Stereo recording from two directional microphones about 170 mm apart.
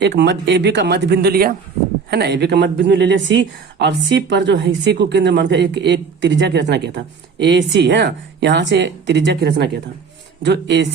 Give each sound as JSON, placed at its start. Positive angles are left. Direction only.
{"t": 0.0, "sound": "a woman's voice", "side_deg": -85}